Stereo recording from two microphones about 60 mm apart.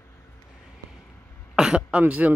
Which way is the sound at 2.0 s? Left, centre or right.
Right.